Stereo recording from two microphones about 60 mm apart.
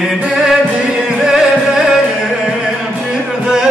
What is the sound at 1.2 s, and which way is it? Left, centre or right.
Music, centre.